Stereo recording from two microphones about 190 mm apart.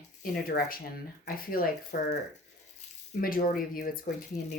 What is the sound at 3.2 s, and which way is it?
Speech, 50° left (ahead or behind).